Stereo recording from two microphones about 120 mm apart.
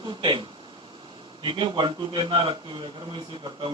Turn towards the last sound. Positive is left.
turn(degrees=-40)  # may be behind; listen again after turning